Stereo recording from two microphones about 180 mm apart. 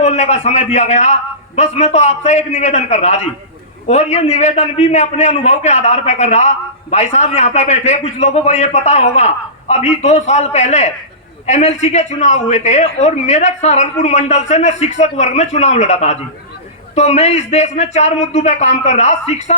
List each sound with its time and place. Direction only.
0.0 s a man's voice: 40° left (ahead or behind)